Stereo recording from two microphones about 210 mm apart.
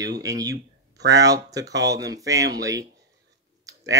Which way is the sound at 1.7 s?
55° right (ahead or behind).